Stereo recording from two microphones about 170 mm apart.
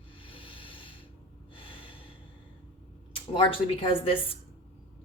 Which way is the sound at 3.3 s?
30° left (ahead or behind).